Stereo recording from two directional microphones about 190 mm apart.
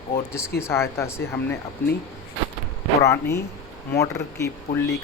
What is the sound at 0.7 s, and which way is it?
Speech, 15° left (ahead or behind).